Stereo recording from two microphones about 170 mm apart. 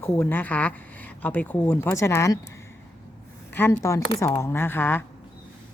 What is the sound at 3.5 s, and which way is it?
Speech, 15° left (ahead or behind).